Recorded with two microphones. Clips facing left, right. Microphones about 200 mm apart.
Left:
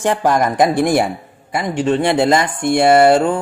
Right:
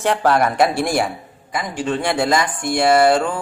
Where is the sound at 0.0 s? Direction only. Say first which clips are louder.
Left 1 dB; 15° left (ahead or behind).